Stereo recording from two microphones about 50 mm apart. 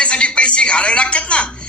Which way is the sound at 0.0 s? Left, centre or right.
Left.